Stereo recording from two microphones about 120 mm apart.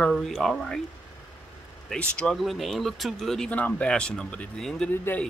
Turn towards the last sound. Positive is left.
turn(degrees=15)  # may be behind; listen again after turning